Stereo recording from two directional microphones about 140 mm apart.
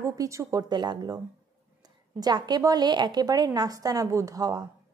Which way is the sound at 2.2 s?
30° right (ahead or behind).